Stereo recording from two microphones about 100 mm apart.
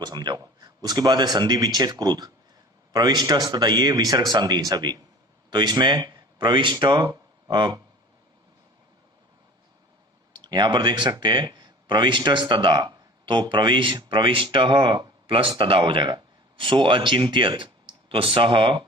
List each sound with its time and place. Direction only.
0.0 s speech: 45° right (ahead or behind)
10.3 s speech: 50° right (ahead or behind)